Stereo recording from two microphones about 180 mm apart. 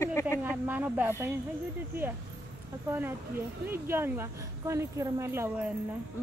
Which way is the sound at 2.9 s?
10° right (ahead or behind).